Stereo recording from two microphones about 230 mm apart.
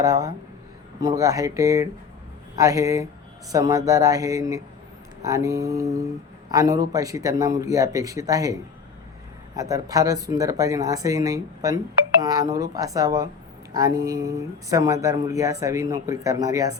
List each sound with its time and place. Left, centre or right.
0.0 s speech: centre
9.6 s speech: centre